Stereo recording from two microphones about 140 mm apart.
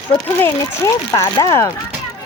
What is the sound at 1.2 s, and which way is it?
Speech, 25° left (ahead or behind).